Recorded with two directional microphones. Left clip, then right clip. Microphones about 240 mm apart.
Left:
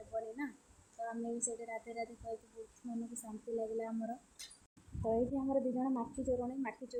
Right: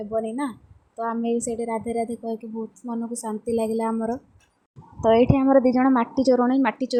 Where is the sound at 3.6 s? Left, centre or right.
Right.